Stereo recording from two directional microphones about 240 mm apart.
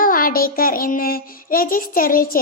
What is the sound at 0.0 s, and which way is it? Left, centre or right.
A child's voice, left.